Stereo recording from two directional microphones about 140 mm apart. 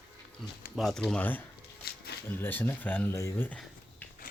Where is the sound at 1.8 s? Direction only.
90° left.